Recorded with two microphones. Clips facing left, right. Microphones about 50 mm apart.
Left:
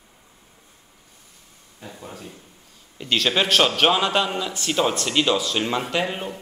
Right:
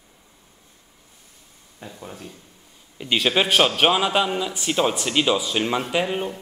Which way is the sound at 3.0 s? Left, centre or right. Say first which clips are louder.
Right 1 dB; centre.